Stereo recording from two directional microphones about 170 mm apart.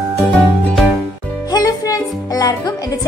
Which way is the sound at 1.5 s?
20° left (ahead or behind).